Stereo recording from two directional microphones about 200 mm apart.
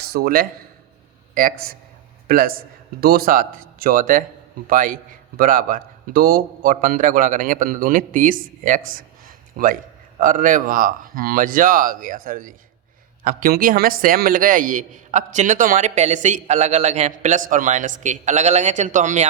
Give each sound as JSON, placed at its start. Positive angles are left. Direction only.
{"t": 0.0, "sound": "a man's voice", "side_deg": -50}
{"t": 2.2, "sound": "a man's voice", "side_deg": -45}